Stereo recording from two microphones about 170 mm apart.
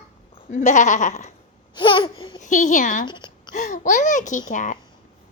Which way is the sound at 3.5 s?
45° left (ahead or behind).